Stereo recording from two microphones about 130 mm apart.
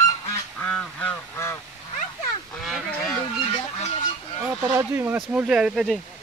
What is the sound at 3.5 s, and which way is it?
Fowl, 50° left (ahead or behind).